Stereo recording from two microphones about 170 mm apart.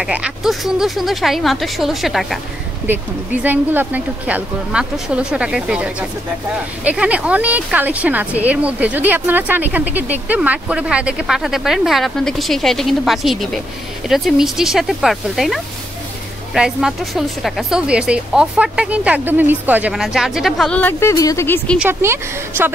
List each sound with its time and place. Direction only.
0.0 s a woman's voice: 5° right (ahead or behind); by 21.7 s 15° left (ahead or behind)
21.7 s speech: 15° right (ahead or behind)